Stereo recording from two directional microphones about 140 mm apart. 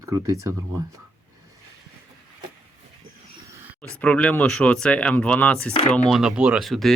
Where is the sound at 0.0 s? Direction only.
20° right (ahead or behind).